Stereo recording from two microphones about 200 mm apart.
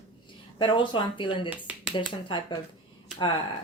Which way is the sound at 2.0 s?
25° left (ahead or behind).